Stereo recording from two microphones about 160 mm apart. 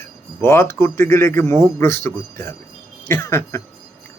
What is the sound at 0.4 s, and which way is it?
Speech, 15° left (ahead or behind).